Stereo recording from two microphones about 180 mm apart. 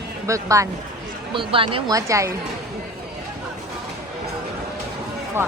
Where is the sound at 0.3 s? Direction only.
15° right (ahead or behind).